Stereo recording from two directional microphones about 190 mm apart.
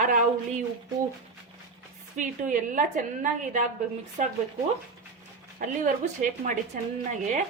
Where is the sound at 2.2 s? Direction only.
45° right (ahead or behind).